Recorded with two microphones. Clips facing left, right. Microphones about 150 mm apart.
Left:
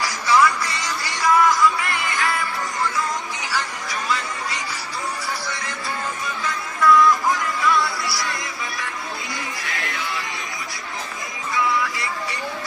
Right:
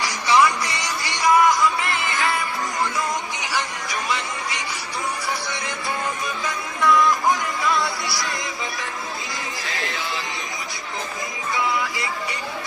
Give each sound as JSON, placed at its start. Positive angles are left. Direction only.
{"t": 0.0, "sound": "music", "side_deg": -15}
{"t": 3.5, "sound": "music", "side_deg": -20}
{"t": 6.8, "sound": "music", "side_deg": -20}
{"t": 9.6, "sound": "chatter", "side_deg": -25}
{"t": 11.5, "sound": "music", "side_deg": -25}